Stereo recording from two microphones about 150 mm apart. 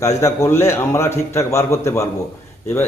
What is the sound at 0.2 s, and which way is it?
A man's voice, 15° left (ahead or behind).